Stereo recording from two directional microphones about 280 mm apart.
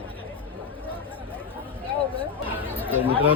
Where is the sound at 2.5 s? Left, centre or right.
Centre.